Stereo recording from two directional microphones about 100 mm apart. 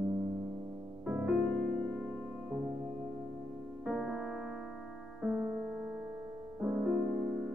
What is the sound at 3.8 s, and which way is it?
Music, 5° right (ahead or behind).